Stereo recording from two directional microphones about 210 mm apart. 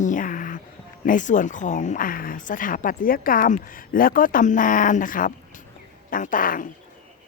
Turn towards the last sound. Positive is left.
turn(degrees=40)  # may be behind; listen again after turning